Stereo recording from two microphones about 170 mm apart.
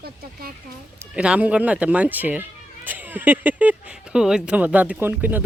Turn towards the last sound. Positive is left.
turn(degrees=-10)  # may be behind; listen again after turning